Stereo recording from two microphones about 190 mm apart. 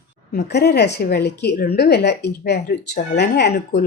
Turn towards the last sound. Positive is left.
turn(degrees=60)  # may be behind; listen again after turning